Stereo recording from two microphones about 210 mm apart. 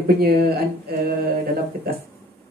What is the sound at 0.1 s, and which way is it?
Speech, 50° right (ahead or behind).